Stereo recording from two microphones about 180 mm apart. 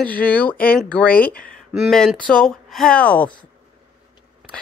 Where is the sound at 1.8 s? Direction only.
Centre (ahead or behind).